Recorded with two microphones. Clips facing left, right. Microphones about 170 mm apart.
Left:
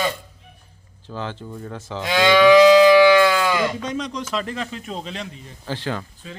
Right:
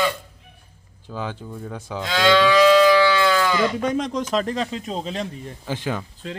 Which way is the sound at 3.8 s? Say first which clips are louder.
Right 4 dB; 50° right (ahead or behind).